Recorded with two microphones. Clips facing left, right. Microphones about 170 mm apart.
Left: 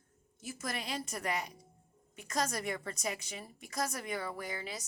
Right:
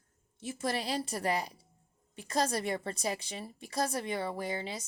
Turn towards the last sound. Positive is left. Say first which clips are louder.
# right 5 dB
turn(degrees=-25)  # may be behind; listen again after turning